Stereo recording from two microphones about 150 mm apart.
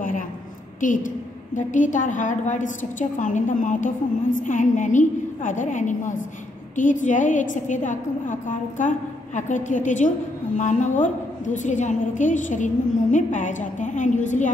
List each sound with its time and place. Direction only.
0.7 s a woman's voice: 60° left (ahead or behind)